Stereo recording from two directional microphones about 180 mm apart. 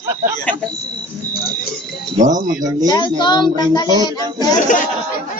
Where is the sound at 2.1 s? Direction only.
45° right (ahead or behind).